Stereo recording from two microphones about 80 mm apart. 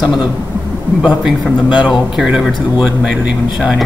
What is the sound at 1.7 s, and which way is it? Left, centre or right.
Speech, centre.